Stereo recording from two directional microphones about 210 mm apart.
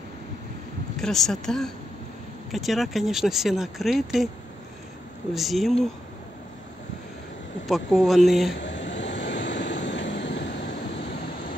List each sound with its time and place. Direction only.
0.9 s speech: centre (ahead or behind)
5.3 s speech: centre (ahead or behind)
7.6 s speech: centre (ahead or behind)
8.5 s vehicle: 60° left (ahead or behind)